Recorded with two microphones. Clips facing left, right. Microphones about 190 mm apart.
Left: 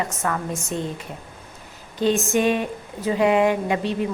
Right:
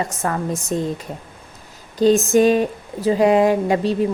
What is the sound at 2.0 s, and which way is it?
A woman's voice, 40° right (ahead or behind).